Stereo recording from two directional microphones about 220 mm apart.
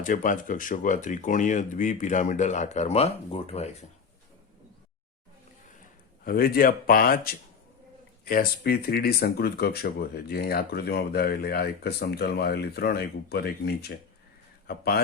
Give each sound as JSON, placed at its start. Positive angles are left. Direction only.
{"t": 0.0, "sound": "speech", "side_deg": 35}
{"t": 6.2, "sound": "speech", "side_deg": 40}